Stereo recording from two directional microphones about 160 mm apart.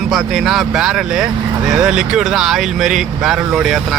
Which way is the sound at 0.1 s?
Centre (ahead or behind).